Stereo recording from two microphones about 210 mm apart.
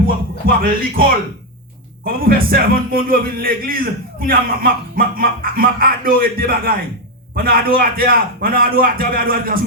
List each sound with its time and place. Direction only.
0.4 s a man's voice: 45° right (ahead or behind)